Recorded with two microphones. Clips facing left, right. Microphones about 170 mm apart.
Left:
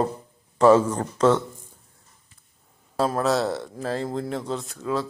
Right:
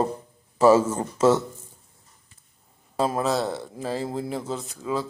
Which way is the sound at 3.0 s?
5° right (ahead or behind).